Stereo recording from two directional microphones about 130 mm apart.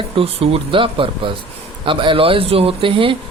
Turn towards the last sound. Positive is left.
turn(degrees=-45)  # may be behind; listen again after turning